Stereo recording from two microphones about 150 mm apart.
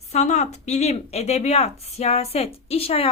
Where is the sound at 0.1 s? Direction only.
50° left (ahead or behind).